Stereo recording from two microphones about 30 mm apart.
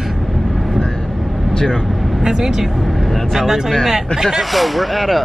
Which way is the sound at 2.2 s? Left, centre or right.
Centre.